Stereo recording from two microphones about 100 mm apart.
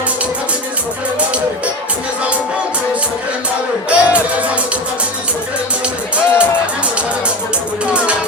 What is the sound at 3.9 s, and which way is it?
Music, 10° right (ahead or behind).